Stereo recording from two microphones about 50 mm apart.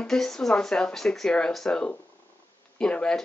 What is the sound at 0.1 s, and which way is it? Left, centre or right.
Speech, centre.